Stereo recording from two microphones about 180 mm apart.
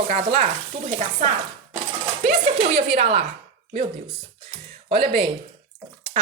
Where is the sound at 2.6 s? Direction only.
35° right (ahead or behind).